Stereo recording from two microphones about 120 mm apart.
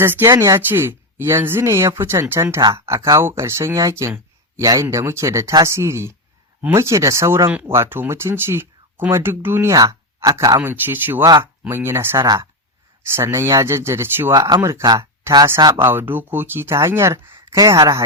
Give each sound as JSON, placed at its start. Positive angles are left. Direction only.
{"t": 0.0, "sound": "speech", "side_deg": -20}
{"t": 15.7, "sound": "speech", "side_deg": -20}